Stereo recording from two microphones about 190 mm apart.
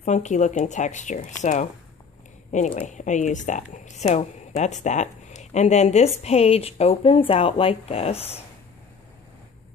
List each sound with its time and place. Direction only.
0.0 s a woman's voice: 40° left (ahead or behind)